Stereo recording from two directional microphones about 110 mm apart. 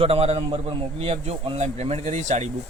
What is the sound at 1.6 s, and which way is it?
Speech, 80° right.